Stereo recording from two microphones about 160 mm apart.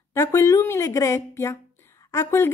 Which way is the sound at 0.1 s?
20° left (ahead or behind).